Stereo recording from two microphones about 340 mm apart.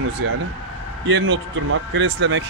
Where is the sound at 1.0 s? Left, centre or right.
Right.